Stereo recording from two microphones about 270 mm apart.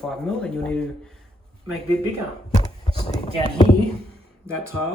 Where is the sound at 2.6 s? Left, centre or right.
Centre.